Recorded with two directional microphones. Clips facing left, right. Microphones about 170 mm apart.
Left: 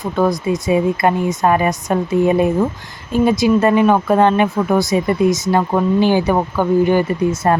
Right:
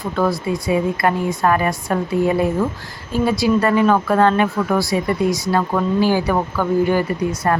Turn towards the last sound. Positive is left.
turn(degrees=20)  # may be behind; listen again after turning